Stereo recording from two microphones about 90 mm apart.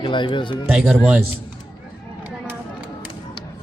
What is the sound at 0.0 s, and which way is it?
Speech, 65° left (ahead or behind).